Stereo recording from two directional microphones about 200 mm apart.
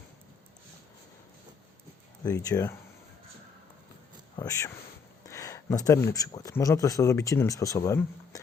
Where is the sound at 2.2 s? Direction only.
15° left (ahead or behind).